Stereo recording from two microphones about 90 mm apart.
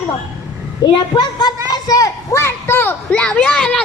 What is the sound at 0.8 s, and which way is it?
A child's voice, 50° left (ahead or behind).